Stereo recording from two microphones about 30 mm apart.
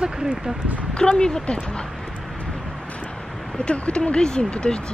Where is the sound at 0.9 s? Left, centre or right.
Left.